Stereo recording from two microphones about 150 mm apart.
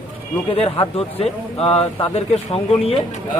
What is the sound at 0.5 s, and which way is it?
A man's voice, 40° left (ahead or behind).